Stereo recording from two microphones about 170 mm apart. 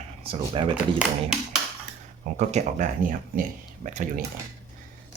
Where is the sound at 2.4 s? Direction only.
45° right (ahead or behind).